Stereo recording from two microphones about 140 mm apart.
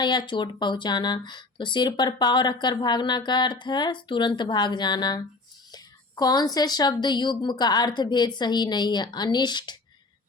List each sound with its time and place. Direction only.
0.0 s speech: 35° left (ahead or behind)